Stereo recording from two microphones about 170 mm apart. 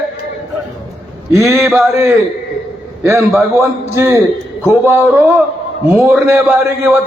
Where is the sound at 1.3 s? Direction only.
15° right (ahead or behind).